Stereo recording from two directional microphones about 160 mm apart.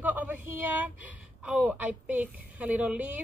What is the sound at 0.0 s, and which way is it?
A woman's voice, 10° right (ahead or behind).